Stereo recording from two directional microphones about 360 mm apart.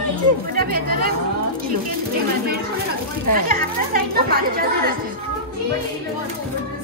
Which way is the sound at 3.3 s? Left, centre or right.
Right.